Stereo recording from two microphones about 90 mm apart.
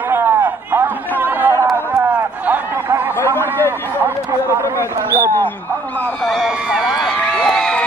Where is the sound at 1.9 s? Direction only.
20° right (ahead or behind).